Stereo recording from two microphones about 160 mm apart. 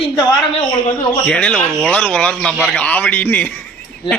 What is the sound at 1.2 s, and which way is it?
Speech, 10° left (ahead or behind).